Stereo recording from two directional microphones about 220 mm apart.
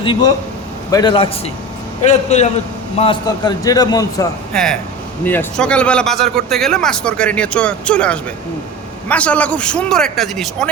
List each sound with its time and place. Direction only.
0.0 s a man's voice: 20° left (ahead or behind)
2.0 s a man's voice: 30° left (ahead or behind)
3.0 s a man's voice: 20° left (ahead or behind)
4.5 s speech: 5° left (ahead or behind)